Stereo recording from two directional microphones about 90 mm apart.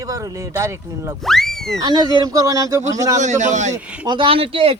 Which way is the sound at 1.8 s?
50° right (ahead or behind).